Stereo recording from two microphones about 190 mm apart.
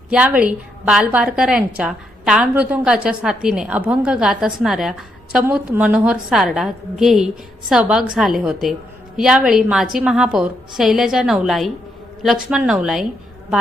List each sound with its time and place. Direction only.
0.1 s a woman's voice: 5° right (ahead or behind)